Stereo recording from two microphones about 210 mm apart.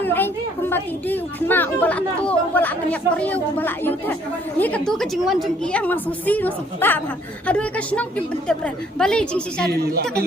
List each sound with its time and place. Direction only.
0.0 s a woman's voice: 10° left (ahead or behind)
9.7 s speech: 50° right (ahead or behind)